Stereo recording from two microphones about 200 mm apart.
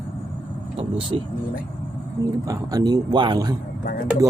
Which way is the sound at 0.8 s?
30° right (ahead or behind).